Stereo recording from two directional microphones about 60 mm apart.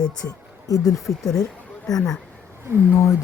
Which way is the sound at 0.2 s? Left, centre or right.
Left.